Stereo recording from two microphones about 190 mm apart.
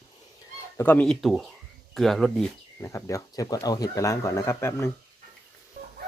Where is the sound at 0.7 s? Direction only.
10° left (ahead or behind).